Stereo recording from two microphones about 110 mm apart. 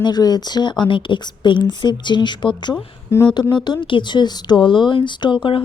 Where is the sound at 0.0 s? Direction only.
40° left (ahead or behind).